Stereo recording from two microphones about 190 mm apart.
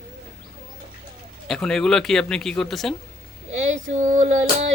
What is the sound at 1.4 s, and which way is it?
Speech, centre (ahead or behind).